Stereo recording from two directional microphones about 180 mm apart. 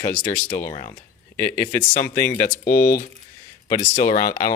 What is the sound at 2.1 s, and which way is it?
Speech, 50° left (ahead or behind).